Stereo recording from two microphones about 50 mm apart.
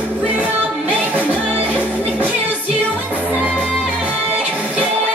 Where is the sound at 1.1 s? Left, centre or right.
Left.